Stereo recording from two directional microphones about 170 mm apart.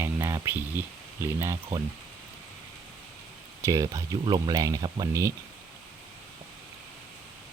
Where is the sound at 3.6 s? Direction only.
20° right (ahead or behind).